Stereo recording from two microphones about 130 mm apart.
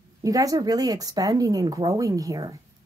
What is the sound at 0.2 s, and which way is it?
Speech, 25° right (ahead or behind).